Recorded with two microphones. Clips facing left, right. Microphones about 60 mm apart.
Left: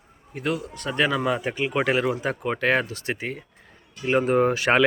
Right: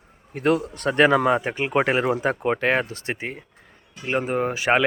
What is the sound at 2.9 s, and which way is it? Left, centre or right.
Speech, right.